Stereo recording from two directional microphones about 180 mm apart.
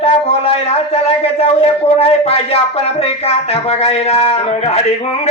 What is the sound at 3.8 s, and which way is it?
Music, 35° left (ahead or behind).